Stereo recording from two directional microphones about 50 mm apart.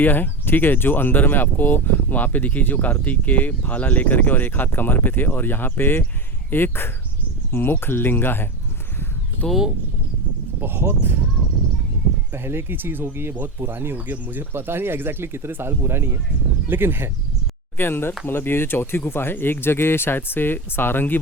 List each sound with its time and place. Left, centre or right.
0.0 s speech: left
10.6 s speech: right
12.3 s speech: right
17.7 s speech: left